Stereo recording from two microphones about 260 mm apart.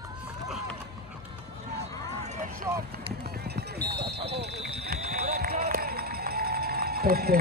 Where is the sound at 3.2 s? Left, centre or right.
Right.